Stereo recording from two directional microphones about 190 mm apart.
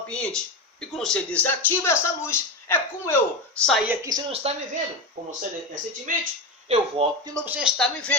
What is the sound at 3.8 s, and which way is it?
Speech, 15° right (ahead or behind).